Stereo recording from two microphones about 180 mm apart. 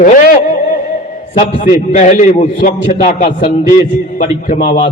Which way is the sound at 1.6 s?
40° left (ahead or behind).